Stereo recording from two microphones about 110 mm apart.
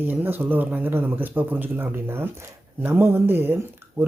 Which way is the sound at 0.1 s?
15° right (ahead or behind).